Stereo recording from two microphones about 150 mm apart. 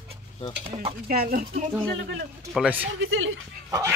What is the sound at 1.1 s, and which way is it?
Speech, 80° right.